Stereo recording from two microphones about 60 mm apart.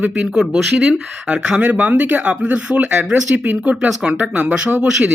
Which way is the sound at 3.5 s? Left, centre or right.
Right.